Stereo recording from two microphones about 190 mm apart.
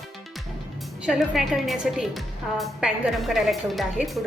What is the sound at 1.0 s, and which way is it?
A woman's voice, centre (ahead or behind).